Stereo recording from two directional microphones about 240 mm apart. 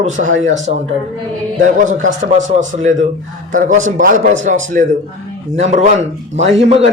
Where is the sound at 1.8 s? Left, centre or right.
Right.